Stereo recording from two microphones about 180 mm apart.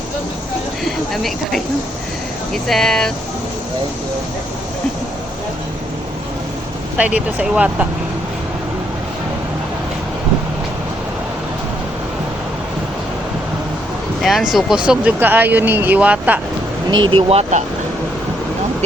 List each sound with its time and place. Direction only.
0.9 s speech: centre (ahead or behind)
6.9 s speech: 5° right (ahead or behind)
14.2 s speech: centre (ahead or behind)
17.2 s speech: 35° right (ahead or behind)